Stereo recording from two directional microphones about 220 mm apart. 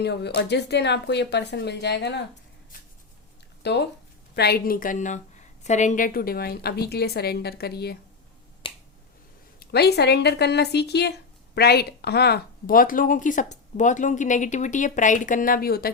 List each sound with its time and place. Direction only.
0.0 s a woman's voice: 50° left (ahead or behind)
3.6 s a woman's voice: 50° left (ahead or behind)
8.6 s finger snapping: 25° left (ahead or behind)
9.6 s a woman's voice: 45° left (ahead or behind)